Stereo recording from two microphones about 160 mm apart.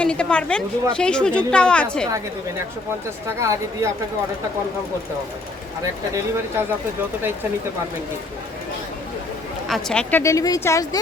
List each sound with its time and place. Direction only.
0.0 s a woman's voice: 5° left (ahead or behind)
3.2 s speech: 20° right (ahead or behind)
9.6 s a woman's voice: 5° left (ahead or behind); by 11.0 s 20° left (ahead or behind)